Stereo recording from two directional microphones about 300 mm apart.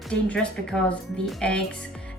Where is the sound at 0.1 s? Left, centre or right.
Centre.